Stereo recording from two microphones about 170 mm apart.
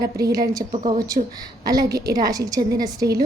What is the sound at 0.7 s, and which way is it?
Speech, 35° right (ahead or behind).